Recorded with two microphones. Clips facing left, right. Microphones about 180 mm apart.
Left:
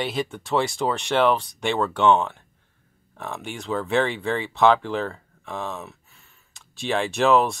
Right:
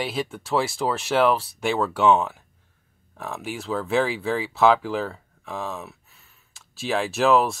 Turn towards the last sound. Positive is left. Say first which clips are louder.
# even
turn(degrees=0)  # may be behind; listen again after turning